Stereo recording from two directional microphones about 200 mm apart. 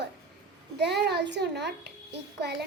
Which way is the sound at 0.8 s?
55° right (ahead or behind).